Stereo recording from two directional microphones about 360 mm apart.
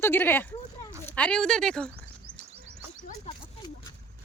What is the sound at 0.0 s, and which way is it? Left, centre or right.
Speech, centre.